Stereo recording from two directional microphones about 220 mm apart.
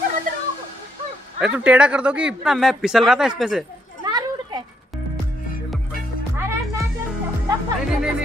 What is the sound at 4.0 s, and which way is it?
Children playing, 20° right (ahead or behind).